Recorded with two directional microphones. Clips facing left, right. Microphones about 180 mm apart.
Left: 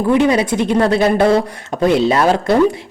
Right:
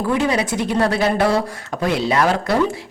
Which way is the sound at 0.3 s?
25° left (ahead or behind).